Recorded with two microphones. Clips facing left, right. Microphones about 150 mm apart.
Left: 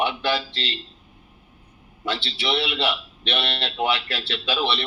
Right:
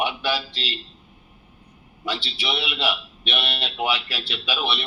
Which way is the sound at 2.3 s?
10° right (ahead or behind).